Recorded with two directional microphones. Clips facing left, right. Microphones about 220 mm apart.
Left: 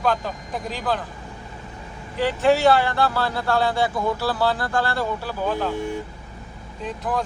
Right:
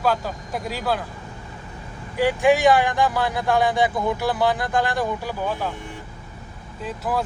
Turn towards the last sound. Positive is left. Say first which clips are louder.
# even
turn(degrees=-5)  # may be behind; listen again after turning